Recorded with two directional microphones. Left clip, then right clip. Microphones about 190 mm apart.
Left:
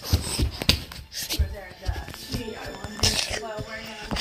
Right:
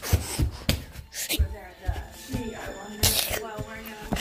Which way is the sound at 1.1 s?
40° right (ahead or behind).